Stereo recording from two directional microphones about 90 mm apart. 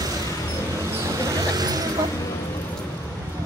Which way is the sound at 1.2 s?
40° right (ahead or behind).